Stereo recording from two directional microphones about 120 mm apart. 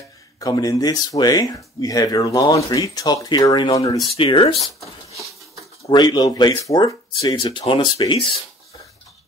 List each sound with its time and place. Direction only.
0.4 s speech: 30° left (ahead or behind)
4.2 s speech: 45° left (ahead or behind)
4.6 s a sound: centre (ahead or behind)
5.9 s speech: 35° left (ahead or behind)
7.3 s speech: 45° left (ahead or behind)